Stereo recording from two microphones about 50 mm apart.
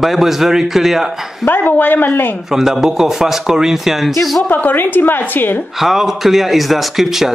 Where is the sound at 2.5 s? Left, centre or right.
Centre.